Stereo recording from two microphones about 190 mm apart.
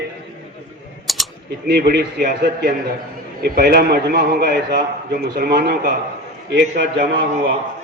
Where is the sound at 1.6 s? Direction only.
55° right (ahead or behind).